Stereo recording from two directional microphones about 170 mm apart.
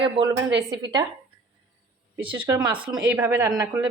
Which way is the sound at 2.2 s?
30° right (ahead or behind).